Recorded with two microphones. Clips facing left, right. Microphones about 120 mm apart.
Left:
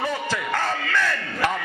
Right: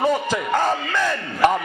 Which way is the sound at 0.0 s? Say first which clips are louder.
Right 6 dB; 20° right (ahead or behind).